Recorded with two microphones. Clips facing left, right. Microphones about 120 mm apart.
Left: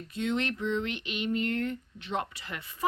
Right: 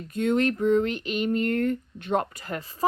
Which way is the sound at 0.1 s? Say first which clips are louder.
Right 7 dB; 50° right (ahead or behind).